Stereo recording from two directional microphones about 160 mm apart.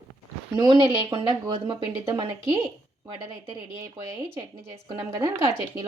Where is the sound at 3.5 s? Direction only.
15° right (ahead or behind).